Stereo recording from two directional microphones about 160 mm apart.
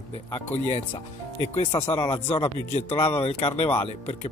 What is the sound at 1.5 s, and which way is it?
Speech, 35° left (ahead or behind).